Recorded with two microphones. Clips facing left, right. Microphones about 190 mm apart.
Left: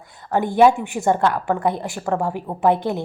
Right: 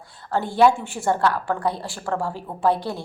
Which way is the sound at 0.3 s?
20° left (ahead or behind).